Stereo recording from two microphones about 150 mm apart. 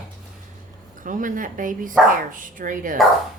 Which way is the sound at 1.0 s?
60° right (ahead or behind).